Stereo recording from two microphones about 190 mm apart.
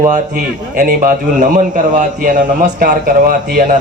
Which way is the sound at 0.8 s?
45° right (ahead or behind).